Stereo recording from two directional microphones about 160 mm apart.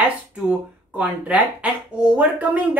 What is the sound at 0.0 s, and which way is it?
A woman's voice, 10° right (ahead or behind).